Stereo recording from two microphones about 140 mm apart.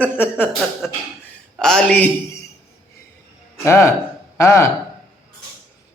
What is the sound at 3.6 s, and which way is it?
A man's voice, 20° left (ahead or behind).